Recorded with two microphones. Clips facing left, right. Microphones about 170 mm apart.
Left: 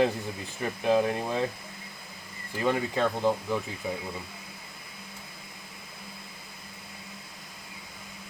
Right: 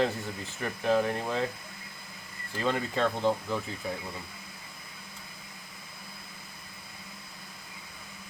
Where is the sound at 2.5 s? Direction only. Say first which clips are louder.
Left 2 dB; 15° left (ahead or behind).